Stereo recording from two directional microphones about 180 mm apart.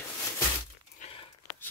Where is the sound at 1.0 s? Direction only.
40° left (ahead or behind).